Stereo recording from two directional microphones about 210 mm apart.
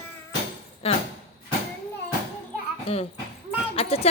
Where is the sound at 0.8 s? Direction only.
30° left (ahead or behind).